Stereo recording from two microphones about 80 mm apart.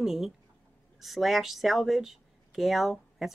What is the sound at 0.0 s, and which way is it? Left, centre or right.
Speech, centre.